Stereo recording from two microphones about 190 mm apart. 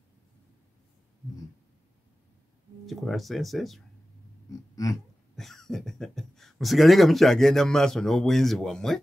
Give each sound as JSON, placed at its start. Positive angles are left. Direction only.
{"t": 2.9, "sound": "speech", "side_deg": 0}
{"t": 4.5, "sound": "pig", "side_deg": 20}
{"t": 5.3, "sound": "speech", "side_deg": 0}